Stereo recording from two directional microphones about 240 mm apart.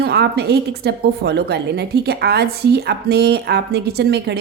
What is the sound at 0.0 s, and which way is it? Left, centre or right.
A woman's voice, right.